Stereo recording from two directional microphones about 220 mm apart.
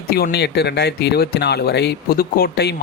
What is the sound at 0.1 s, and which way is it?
Speech, 45° left (ahead or behind).